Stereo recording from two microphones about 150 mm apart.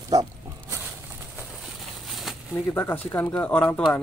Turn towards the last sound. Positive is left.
turn(degrees=5)  # may be behind; listen again after turning